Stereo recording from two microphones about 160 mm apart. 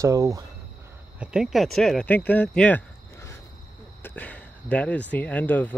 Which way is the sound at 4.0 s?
10° left (ahead or behind).